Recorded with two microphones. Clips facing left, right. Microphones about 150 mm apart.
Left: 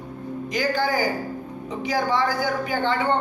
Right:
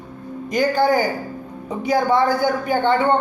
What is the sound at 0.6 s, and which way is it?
Speech, 55° right (ahead or behind).